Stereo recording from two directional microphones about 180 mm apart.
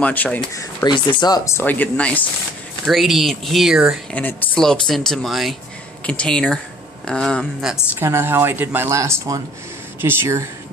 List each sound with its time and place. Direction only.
0.0 s speech: 10° left (ahead or behind)
4.1 s speech: 10° left (ahead or behind)
8.0 s speech: 15° right (ahead or behind)